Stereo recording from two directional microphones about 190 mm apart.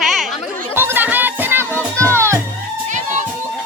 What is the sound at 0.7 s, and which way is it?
Music, 10° right (ahead or behind).